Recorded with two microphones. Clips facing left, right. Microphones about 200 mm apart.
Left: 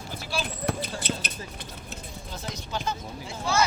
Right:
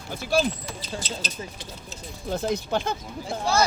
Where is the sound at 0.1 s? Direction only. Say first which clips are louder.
Right 10 dB; 50° right (ahead or behind).